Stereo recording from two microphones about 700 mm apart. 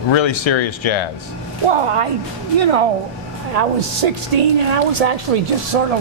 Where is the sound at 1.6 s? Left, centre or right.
Right.